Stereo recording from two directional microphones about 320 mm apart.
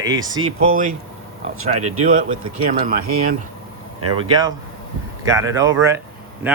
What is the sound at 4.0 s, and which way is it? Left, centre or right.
Speech, right.